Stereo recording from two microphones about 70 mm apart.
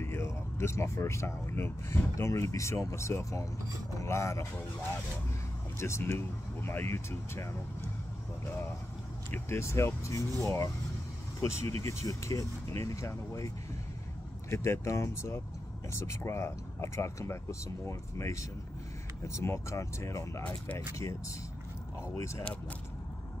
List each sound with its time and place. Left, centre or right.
0.0 s speech: left
5.8 s speech: left
9.3 s speech: left
14.5 s speech: left
22.1 s speech: left